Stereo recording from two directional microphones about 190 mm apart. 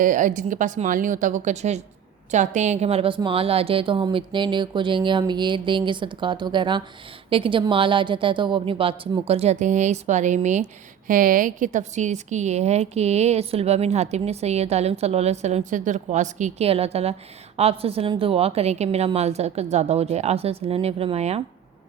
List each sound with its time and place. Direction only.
0.0 s a woman's voice: 45° right (ahead or behind)